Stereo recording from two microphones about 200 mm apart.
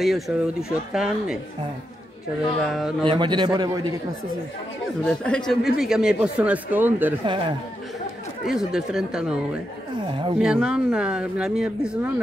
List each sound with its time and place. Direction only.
0.0 s speech: centre (ahead or behind)
2.6 s speech: centre (ahead or behind)
3.1 s a man's voice: 25° right (ahead or behind)
5.0 s speech: 5° left (ahead or behind)
7.2 s a man's voice: 25° right (ahead or behind)
8.5 s speech: centre (ahead or behind)